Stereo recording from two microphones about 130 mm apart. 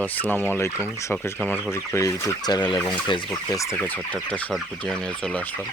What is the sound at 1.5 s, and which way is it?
Fowl, 20° left (ahead or behind).